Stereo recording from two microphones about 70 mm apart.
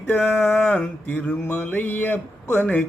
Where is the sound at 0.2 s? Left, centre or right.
Centre.